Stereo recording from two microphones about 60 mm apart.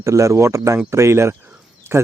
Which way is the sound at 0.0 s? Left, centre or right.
Right.